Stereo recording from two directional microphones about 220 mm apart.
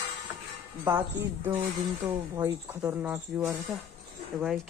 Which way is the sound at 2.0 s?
15° right (ahead or behind).